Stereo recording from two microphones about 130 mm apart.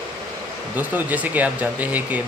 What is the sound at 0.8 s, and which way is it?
Speech, 10° right (ahead or behind).